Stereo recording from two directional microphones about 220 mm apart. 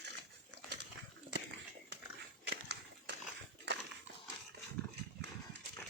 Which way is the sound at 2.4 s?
50° right (ahead or behind).